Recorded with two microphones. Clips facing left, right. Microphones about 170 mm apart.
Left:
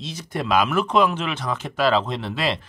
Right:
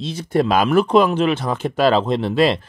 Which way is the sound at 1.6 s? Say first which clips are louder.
Right 2 dB; 50° right (ahead or behind).